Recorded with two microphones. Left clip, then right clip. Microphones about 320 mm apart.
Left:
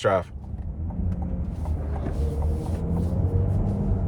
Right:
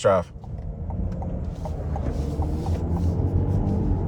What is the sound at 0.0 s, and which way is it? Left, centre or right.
Speech, centre.